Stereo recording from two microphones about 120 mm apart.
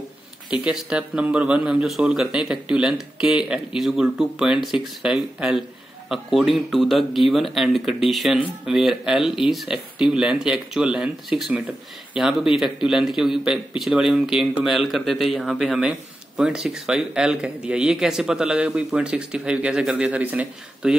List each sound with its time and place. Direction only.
0.5 s speech: 5° right (ahead or behind)